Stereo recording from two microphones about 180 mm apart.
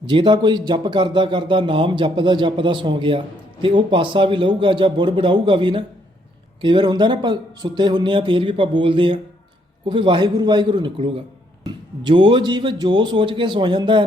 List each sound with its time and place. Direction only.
0.0 s speech: 25° right (ahead or behind)